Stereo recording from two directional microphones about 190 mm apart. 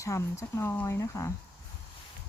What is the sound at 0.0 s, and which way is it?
Speech, 15° left (ahead or behind).